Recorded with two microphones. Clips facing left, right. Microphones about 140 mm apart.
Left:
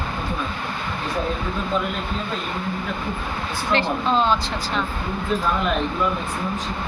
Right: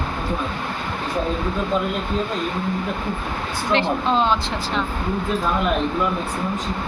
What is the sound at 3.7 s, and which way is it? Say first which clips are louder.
Speech: right 1 dB; 20° right (ahead or behind).